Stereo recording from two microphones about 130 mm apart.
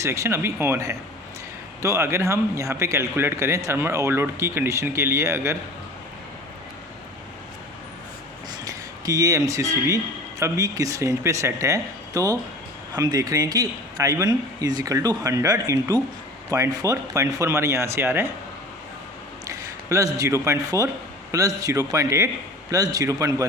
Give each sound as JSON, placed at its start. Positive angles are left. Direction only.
{"t": 0.0, "sound": "speech", "side_deg": -20}
{"t": 8.6, "sound": "speech", "side_deg": -25}
{"t": 19.5, "sound": "a man's voice", "side_deg": -25}